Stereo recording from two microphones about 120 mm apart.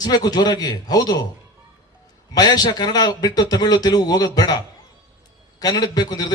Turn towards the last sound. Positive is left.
turn(degrees=35)  # may be behind; listen again after turning